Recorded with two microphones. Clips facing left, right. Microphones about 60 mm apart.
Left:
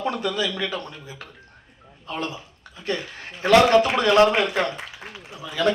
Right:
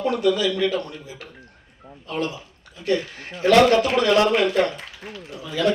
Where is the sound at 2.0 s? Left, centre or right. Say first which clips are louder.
Right 3 dB; left.